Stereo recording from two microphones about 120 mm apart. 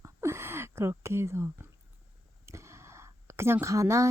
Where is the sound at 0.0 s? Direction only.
25° right (ahead or behind).